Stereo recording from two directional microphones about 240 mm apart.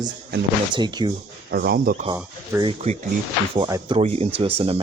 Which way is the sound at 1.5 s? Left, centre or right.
Right.